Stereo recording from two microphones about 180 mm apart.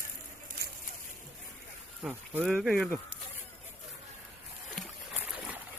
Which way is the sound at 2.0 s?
10° right (ahead or behind).